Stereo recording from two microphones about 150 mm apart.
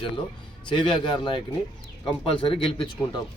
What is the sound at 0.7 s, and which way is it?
Speech, 35° left (ahead or behind).